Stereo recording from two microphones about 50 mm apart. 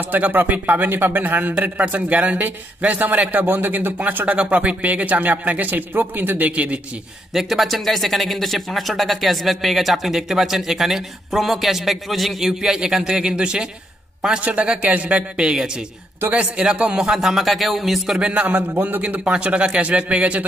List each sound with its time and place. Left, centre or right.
0.0 s speech: right
3.5 s speech: right
7.3 s speech: centre
12.4 s a man's voice: centre
14.4 s speech: right
15.4 s a man's voice: centre
16.3 s speech: right
16.6 s a man's voice: centre
17.1 s speech: centre
18.1 s speech: right
18.5 s speech: right
19.0 s speech: right